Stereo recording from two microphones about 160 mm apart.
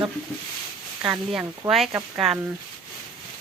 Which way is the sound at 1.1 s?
5° right (ahead or behind).